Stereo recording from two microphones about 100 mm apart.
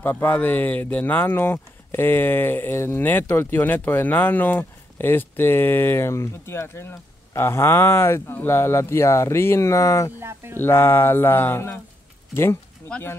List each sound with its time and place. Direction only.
0.0 s speech: 20° left (ahead or behind)
10.2 s speech: 25° right (ahead or behind)
10.6 s speech: 25° left (ahead or behind)